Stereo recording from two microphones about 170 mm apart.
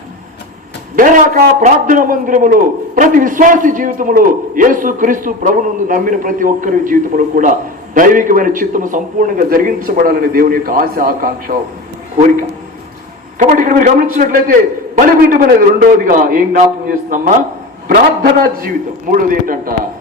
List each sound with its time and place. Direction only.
0.9 s a man's voice: 55° right (ahead or behind)
13.4 s a man's voice: 55° right (ahead or behind)